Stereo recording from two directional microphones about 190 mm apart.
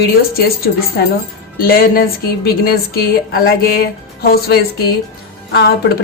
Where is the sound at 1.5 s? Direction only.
50° left (ahead or behind).